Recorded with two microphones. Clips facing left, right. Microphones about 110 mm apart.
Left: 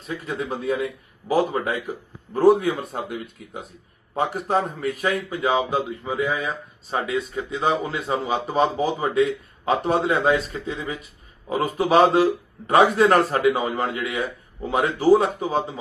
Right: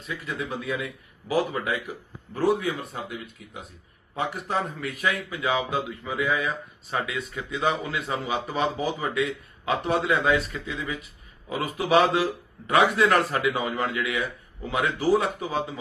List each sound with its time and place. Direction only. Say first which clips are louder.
0.1 s a man's voice: left 4 dB; 35° left (ahead or behind)